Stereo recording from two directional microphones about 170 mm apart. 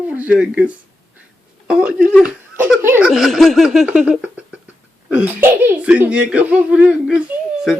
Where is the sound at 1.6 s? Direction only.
5° right (ahead or behind).